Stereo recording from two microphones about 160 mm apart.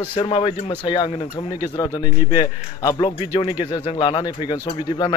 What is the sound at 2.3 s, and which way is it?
A man's voice, 30° left (ahead or behind).